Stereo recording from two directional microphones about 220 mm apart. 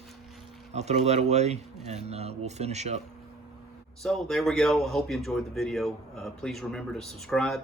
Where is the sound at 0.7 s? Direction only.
30° right (ahead or behind).